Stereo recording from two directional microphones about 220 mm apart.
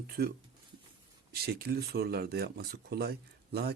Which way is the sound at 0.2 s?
50° right (ahead or behind).